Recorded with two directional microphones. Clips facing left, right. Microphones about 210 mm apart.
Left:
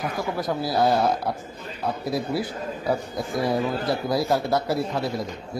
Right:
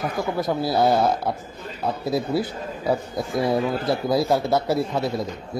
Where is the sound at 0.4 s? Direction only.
25° right (ahead or behind).